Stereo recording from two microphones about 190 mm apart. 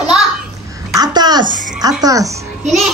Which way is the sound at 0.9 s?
20° right (ahead or behind).